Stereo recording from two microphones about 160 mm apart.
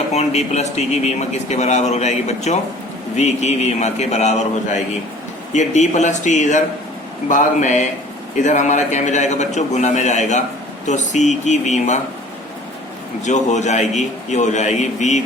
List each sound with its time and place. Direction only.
0.1 s speech: 45° left (ahead or behind)
5.5 s speech: 50° left (ahead or behind)
13.2 s speech: 50° left (ahead or behind)